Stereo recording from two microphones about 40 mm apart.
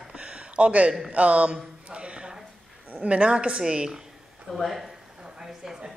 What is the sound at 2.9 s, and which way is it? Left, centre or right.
Speech, right.